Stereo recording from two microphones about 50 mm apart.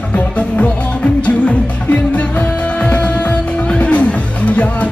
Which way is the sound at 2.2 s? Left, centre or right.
Left.